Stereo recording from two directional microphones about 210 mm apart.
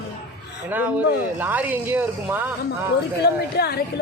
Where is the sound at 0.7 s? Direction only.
5° right (ahead or behind).